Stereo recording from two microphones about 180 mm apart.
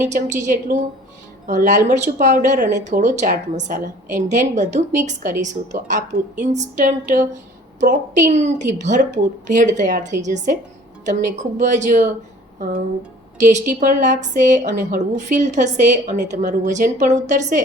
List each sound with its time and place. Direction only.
0.0 s a woman's voice: 40° right (ahead or behind)
13.4 s a woman's voice: 40° right (ahead or behind)